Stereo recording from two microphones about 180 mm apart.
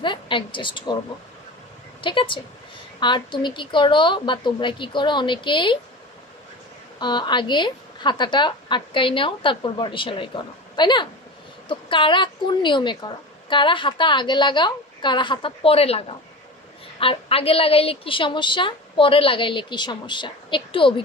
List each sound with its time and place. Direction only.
0.0 s a woman's voice: 25° left (ahead or behind)
2.0 s a woman's voice: 30° left (ahead or behind)
7.0 s a woman's voice: 25° left (ahead or behind)